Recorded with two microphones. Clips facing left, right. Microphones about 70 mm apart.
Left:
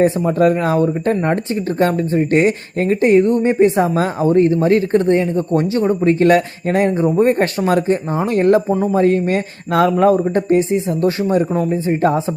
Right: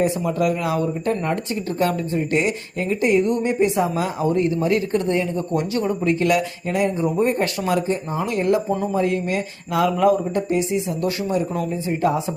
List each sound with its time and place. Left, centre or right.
0.0 s speech: left